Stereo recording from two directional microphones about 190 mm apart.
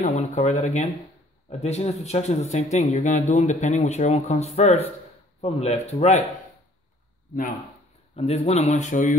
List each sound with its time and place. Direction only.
0.0 s speech: 40° left (ahead or behind)
8.2 s speech: 35° left (ahead or behind)